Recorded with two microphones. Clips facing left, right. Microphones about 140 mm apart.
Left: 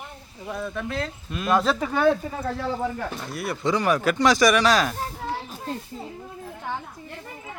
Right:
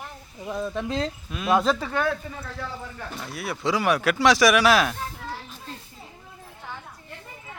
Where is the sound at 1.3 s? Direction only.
Centre (ahead or behind).